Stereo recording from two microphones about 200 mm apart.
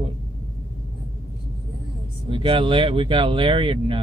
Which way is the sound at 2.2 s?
25° right (ahead or behind).